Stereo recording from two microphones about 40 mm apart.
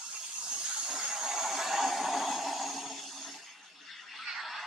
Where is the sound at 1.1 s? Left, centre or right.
Centre.